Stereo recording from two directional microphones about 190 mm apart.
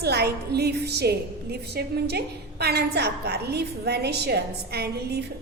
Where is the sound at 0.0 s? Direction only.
55° right (ahead or behind).